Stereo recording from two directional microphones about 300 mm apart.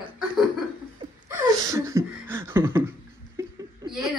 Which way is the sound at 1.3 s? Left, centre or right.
Centre.